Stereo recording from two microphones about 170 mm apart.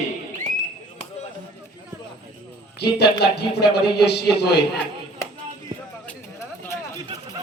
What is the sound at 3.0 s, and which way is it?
A man's voice, 75° left (ahead or behind).